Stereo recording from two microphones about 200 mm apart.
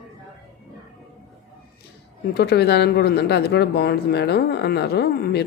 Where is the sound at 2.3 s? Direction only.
55° left (ahead or behind).